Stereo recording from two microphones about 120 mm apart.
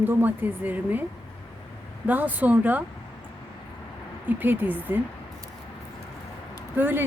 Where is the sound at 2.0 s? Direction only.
15° right (ahead or behind).